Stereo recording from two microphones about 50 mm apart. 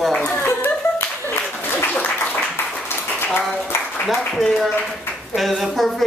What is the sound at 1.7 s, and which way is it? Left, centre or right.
Applause, left.